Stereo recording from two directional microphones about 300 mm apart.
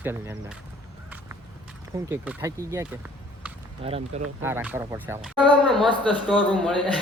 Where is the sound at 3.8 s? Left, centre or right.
Centre.